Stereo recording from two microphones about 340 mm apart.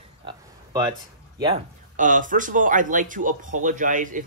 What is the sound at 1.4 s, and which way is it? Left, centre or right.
A man's voice, centre.